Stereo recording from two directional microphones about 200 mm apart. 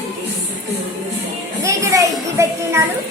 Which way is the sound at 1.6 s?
15° right (ahead or behind).